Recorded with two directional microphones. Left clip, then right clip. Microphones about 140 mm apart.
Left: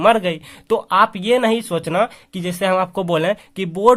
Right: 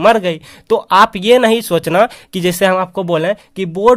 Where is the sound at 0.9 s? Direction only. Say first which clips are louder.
Right 6 dB; 45° right (ahead or behind).